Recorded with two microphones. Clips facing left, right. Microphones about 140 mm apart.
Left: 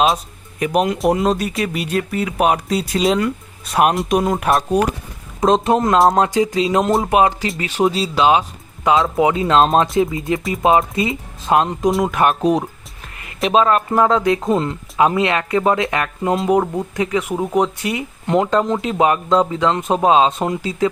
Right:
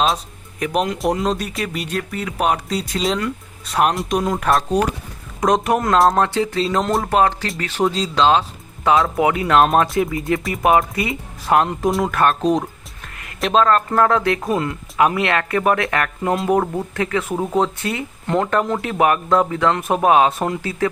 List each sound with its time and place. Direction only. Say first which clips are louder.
0.6 s speech: left 3 dB; 5° left (ahead or behind)
5.4 s speech: left 2 dB; 25° left (ahead or behind)